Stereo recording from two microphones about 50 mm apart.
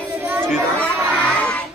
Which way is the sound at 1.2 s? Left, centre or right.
Left.